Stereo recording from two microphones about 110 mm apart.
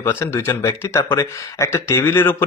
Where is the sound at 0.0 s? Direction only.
25° left (ahead or behind).